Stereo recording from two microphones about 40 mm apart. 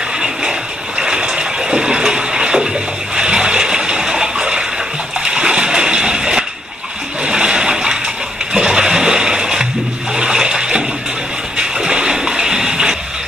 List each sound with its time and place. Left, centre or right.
0.2 s bathtub: centre
3.2 s water: right
5.2 s splash: right
10.1 s water: centre
11.5 s a sound: centre